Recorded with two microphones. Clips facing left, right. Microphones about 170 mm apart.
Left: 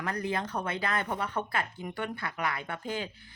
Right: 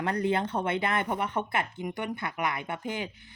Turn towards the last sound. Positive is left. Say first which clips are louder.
# right 1 dB
turn(degrees=-20)  # may be behind; listen again after turning